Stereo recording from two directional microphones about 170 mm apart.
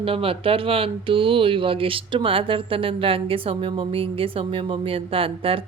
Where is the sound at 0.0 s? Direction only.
35° right (ahead or behind).